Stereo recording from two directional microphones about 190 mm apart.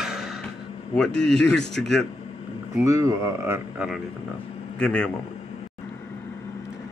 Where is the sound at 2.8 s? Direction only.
15° right (ahead or behind).